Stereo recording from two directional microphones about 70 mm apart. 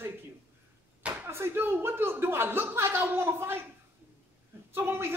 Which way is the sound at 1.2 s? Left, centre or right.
Right.